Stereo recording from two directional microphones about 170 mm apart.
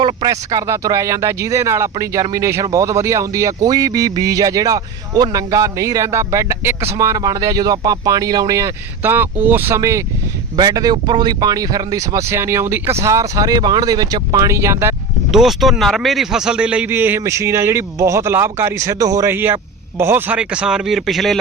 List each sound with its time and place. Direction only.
0.0 s speech: 25° right (ahead or behind)
15.3 s a man's voice: centre (ahead or behind)